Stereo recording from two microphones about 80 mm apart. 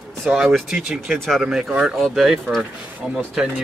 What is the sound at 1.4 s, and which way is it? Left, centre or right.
Speech, centre.